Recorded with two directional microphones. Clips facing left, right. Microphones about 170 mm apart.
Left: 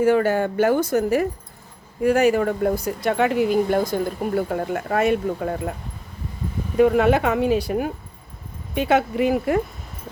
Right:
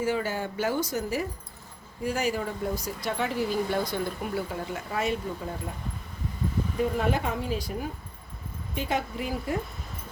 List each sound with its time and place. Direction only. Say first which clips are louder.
0.0 s speech: left 10 dB; 60° left (ahead or behind)
6.7 s speech: left 12 dB; 75° left (ahead or behind)